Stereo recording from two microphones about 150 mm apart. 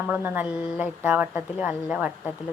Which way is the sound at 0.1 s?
5° right (ahead or behind).